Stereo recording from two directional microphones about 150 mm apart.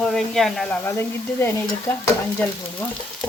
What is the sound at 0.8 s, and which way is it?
Speech, 15° left (ahead or behind).